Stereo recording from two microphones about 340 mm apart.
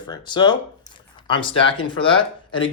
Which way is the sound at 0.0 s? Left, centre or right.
Centre.